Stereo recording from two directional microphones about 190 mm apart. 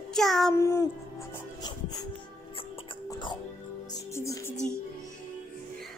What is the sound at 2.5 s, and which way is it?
Music, 30° left (ahead or behind).